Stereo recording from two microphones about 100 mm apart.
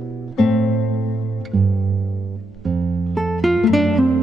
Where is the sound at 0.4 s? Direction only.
Centre (ahead or behind).